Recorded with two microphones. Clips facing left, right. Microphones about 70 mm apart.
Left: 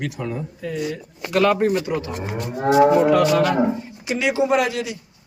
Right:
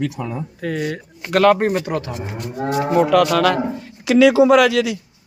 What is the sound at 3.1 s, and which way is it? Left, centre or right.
A man's voice, right.